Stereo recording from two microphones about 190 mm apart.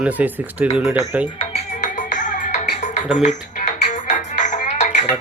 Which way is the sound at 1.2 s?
30° left (ahead or behind).